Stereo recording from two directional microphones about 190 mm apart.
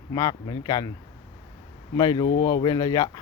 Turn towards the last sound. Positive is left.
turn(degrees=20)  # may be behind; listen again after turning